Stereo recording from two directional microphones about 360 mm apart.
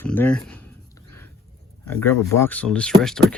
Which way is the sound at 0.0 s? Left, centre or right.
Centre.